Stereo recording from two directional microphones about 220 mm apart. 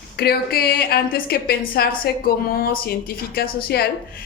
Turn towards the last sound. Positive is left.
turn(degrees=45)  # may be behind; listen again after turning